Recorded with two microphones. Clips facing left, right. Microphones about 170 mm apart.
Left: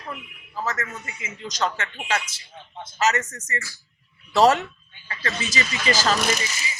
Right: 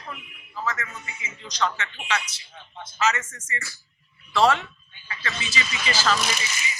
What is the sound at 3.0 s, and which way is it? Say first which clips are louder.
A man's voice: left 2 dB; 40° left (ahead or behind).